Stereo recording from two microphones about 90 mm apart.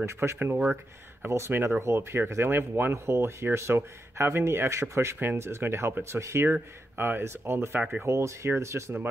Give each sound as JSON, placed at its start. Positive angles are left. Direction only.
{"t": 0.0, "sound": "speech", "side_deg": -30}